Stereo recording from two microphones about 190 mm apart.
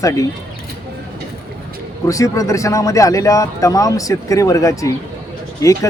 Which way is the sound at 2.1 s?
15° left (ahead or behind).